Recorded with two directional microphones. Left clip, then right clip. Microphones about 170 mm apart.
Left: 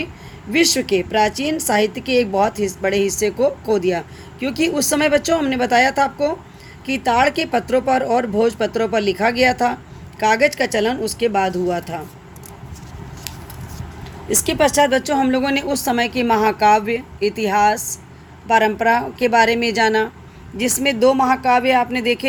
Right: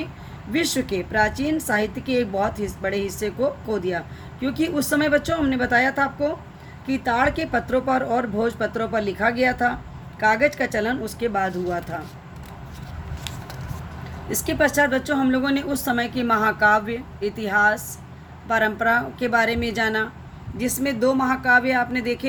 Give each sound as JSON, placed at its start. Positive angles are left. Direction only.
{"t": 0.5, "sound": "a woman's voice", "side_deg": 40}
{"t": 10.6, "sound": "a woman's voice", "side_deg": 45}
{"t": 14.3, "sound": "a woman's voice", "side_deg": 35}